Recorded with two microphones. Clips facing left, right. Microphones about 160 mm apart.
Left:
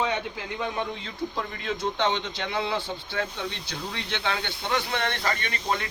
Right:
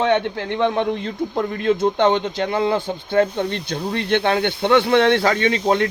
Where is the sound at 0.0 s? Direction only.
75° right (ahead or behind).